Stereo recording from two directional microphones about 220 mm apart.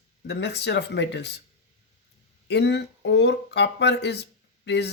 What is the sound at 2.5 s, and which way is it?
Speech, 50° left (ahead or behind).